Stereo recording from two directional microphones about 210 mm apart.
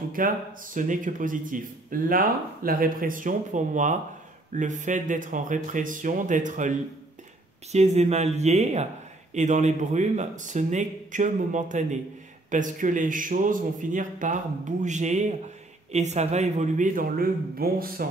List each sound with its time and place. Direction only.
0.2 s speech: 40° right (ahead or behind)